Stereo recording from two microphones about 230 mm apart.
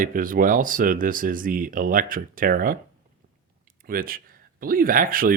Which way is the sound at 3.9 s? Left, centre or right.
Right.